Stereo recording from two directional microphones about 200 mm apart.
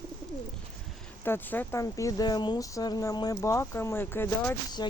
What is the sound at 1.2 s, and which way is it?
Speech, 10° left (ahead or behind).